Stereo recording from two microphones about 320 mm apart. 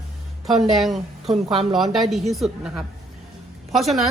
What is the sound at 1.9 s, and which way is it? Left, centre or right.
A woman's voice, centre.